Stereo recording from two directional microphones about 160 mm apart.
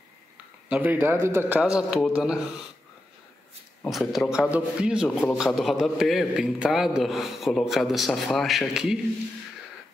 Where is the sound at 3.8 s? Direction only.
5° left (ahead or behind).